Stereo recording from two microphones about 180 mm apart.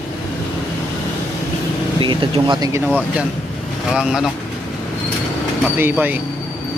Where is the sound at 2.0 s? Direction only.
25° right (ahead or behind).